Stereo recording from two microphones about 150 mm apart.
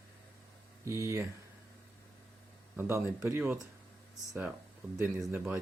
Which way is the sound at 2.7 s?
15° right (ahead or behind).